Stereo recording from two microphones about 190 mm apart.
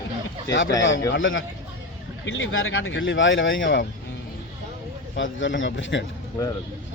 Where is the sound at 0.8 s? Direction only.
90° left.